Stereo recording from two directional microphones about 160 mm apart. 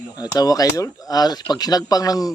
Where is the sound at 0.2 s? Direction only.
25° left (ahead or behind).